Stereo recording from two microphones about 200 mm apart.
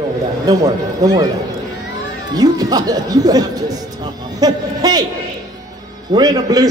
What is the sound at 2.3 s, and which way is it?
A man's voice, 20° right (ahead or behind).